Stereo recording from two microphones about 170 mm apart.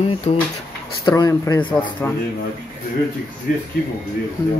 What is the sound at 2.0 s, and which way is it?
Speech, 10° left (ahead or behind).